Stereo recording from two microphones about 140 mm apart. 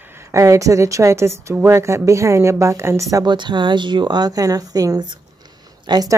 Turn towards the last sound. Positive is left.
turn(degrees=-25)  # may be behind; listen again after turning